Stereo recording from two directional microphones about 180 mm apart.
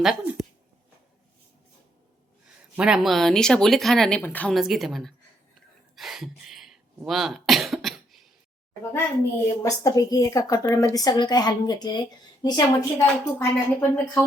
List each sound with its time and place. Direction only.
0.0 s speech: centre (ahead or behind)
2.7 s speech: 5° right (ahead or behind)
6.0 s cough: centre (ahead or behind)
9.6 s a woman's voice: 20° left (ahead or behind)